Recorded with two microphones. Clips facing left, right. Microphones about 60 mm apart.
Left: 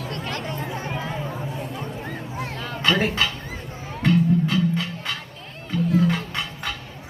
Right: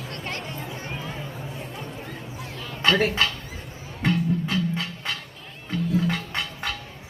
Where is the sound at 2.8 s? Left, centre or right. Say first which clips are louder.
Even; centre.